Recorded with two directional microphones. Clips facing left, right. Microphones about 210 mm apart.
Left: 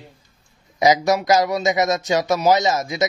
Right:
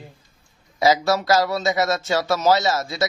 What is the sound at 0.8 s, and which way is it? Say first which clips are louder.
Speech: left 2 dB; 15° left (ahead or behind).